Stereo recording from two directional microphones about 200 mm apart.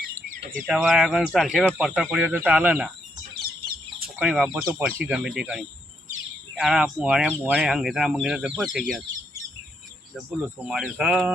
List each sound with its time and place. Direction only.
0.7 s speech: centre (ahead or behind)
4.0 s chicken: 5° right (ahead or behind)
4.6 s speech: 10° right (ahead or behind)
10.2 s speech: 5° right (ahead or behind)